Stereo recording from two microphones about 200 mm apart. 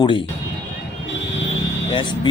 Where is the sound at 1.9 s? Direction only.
25° left (ahead or behind).